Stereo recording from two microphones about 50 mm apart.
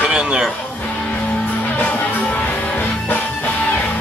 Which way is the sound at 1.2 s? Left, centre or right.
Left.